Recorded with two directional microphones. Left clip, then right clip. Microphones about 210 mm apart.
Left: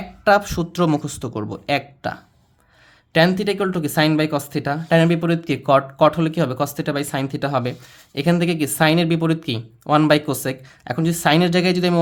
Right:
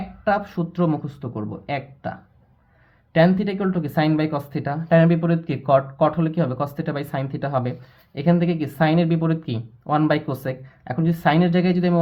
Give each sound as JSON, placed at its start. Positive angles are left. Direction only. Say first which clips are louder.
{"t": 0.3, "sound": "speech", "louder": "left 6 dB", "side_deg": 35}